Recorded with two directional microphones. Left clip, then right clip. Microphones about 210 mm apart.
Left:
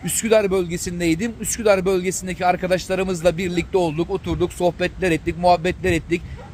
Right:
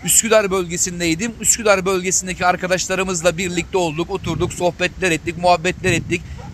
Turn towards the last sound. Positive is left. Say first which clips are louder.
# right 2 dB
turn(degrees=5)  # may be behind; listen again after turning